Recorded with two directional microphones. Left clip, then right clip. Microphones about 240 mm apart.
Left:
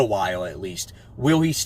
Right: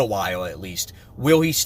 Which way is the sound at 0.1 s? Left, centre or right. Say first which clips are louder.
Left 1 dB; centre.